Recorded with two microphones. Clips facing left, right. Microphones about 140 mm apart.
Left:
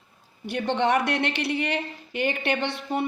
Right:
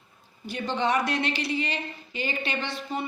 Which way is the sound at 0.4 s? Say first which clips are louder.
Left 3 dB; 65° left (ahead or behind).